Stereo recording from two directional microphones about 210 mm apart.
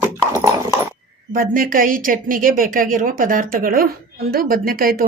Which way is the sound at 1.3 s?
40° right (ahead or behind).